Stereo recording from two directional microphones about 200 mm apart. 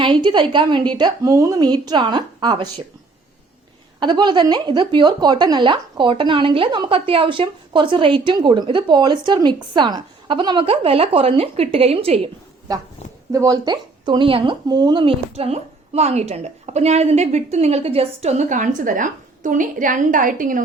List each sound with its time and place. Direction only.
0.0 s a woman's voice: 25° right (ahead or behind)
4.0 s a woman's voice: 20° right (ahead or behind)
12.7 s a woman's voice: 20° right (ahead or behind); by 20.6 s 40° right (ahead or behind)